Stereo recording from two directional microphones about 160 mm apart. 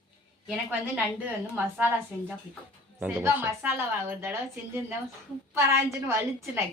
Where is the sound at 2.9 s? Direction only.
10° right (ahead or behind).